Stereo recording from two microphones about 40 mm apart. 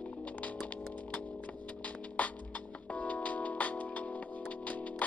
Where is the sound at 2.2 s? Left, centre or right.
Left.